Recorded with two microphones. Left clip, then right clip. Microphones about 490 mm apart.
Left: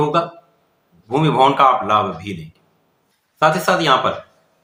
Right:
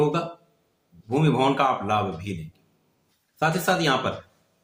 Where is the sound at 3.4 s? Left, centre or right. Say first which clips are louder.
Left 8 dB; right.